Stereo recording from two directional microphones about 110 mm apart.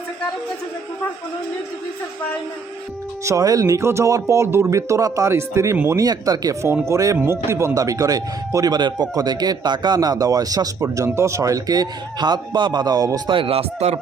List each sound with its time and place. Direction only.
3.2 s speech: 30° right (ahead or behind)
6.0 s speech: 35° right (ahead or behind)
13.3 s speech: 55° right (ahead or behind); by 14.0 s 70° right (ahead or behind)